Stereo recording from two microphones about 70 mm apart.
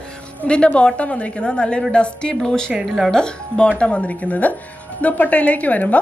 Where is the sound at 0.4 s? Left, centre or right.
Centre.